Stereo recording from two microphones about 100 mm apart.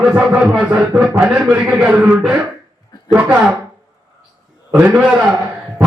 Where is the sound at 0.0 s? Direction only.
10° right (ahead or behind).